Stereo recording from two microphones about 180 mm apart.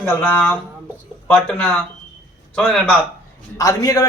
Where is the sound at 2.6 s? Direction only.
5° left (ahead or behind).